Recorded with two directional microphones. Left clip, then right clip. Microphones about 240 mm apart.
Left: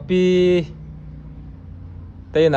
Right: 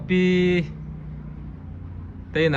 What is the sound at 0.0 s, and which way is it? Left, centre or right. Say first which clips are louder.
Speech: left 5 dB; centre.